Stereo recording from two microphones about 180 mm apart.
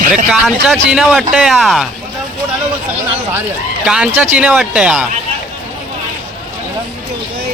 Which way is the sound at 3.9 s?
5° right (ahead or behind).